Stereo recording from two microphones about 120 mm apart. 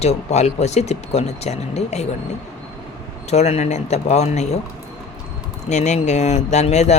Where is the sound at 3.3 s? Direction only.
65° left (ahead or behind).